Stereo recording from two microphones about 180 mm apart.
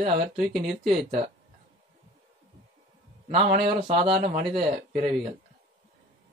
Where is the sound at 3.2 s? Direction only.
40° right (ahead or behind).